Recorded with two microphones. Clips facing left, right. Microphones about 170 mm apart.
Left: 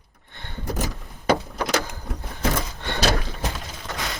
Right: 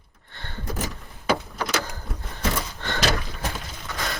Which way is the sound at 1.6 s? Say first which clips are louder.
Left 2 dB; 20° left (ahead or behind).